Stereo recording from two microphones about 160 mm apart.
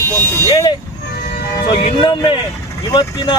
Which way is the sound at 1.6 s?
35° left (ahead or behind).